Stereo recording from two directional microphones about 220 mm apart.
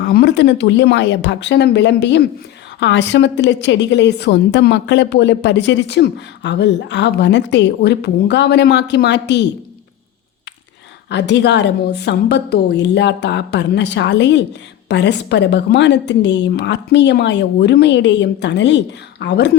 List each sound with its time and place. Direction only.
0.0 s a woman's voice: 50° left (ahead or behind)
11.1 s a woman's voice: 50° left (ahead or behind)